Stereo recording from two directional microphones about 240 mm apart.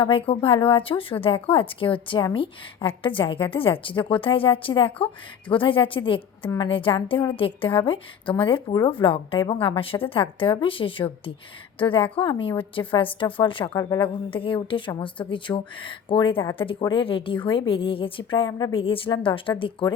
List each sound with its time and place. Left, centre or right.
0.0 s a woman's voice: left